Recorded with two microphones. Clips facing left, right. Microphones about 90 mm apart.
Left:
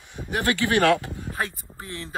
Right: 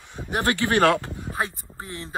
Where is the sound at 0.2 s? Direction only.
20° right (ahead or behind).